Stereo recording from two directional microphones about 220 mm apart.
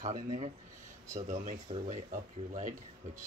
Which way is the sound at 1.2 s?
35° right (ahead or behind).